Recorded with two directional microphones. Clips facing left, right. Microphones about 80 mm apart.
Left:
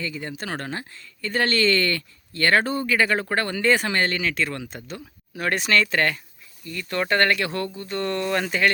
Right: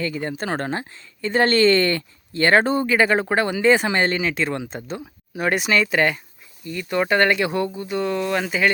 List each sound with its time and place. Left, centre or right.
0.0 s speech: right; by 8.7 s centre